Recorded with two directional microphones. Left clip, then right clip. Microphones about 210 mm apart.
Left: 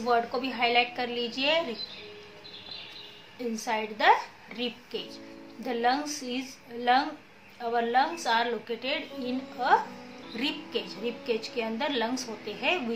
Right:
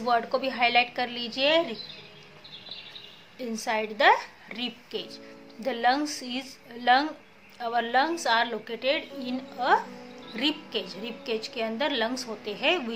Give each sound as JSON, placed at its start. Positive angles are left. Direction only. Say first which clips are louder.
{"t": 0.0, "sound": "a woman's voice", "louder": "right 1 dB", "side_deg": -50}
{"t": 3.5, "sound": "a woman's voice", "louder": "right 4 dB", "side_deg": -50}